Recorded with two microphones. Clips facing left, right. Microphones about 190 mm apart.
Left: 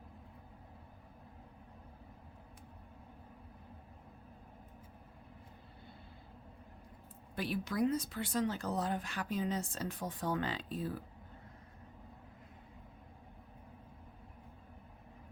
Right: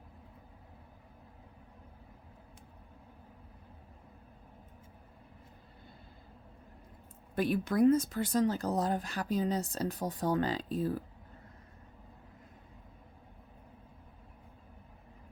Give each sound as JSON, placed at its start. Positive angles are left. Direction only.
{"t": 7.3, "sound": "speech", "side_deg": -50}